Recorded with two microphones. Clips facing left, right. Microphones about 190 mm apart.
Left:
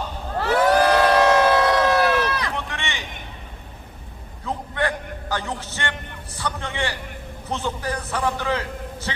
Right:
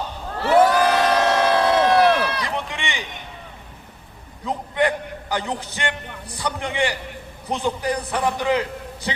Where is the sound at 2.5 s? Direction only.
15° right (ahead or behind).